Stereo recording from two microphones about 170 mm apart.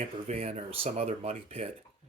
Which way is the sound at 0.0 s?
40° right (ahead or behind).